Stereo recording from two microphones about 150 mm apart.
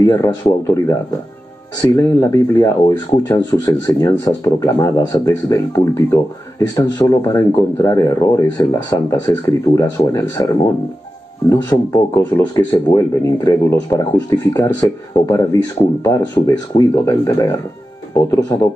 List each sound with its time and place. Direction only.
0.0 s speech: 20° left (ahead or behind)